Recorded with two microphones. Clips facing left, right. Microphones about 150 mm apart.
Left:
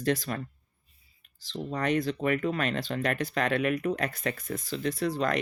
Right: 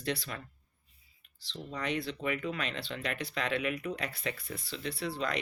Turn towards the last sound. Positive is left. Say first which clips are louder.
# left 7 dB
turn(degrees=45)  # may be behind; listen again after turning